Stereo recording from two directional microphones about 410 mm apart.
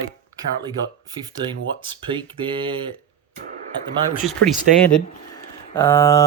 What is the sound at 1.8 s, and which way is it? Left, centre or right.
Speech, centre.